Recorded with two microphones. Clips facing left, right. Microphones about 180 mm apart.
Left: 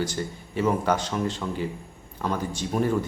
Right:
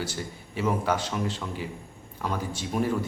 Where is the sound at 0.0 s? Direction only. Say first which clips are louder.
Left 5 dB; 5° right (ahead or behind).